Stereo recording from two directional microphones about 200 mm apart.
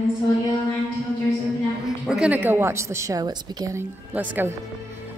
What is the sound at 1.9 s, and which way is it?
A woman's voice, 5° right (ahead or behind).